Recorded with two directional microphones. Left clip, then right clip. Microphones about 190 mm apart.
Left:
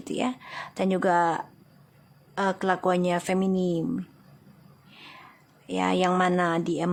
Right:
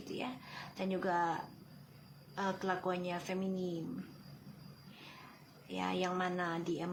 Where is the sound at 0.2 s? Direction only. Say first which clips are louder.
Left 15 dB; 55° left (ahead or behind).